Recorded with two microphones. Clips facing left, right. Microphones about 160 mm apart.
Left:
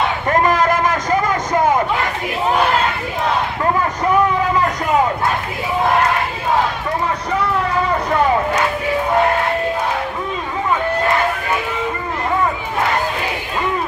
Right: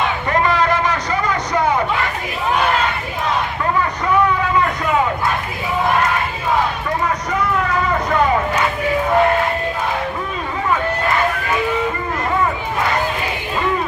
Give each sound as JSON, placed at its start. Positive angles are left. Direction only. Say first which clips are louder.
{"t": 0.3, "sound": "vehicle", "louder": "left 2 dB", "side_deg": 45}